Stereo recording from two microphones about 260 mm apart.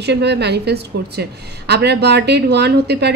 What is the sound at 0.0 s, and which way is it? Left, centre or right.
A woman's voice, right.